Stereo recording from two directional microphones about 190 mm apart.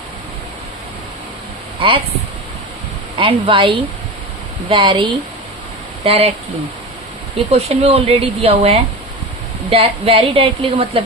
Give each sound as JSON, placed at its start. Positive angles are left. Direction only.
{"t": 1.8, "sound": "a woman's voice", "side_deg": -30}
{"t": 3.2, "sound": "a woman's voice", "side_deg": -30}
{"t": 7.5, "sound": "a woman's voice", "side_deg": -35}